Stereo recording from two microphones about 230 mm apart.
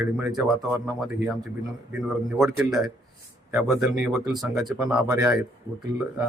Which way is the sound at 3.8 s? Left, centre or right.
Centre.